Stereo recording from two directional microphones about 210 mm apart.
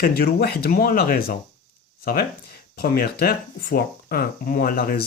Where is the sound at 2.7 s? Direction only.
45° left (ahead or behind).